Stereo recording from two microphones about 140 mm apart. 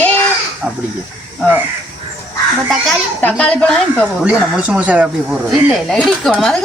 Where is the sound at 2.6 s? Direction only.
Centre (ahead or behind).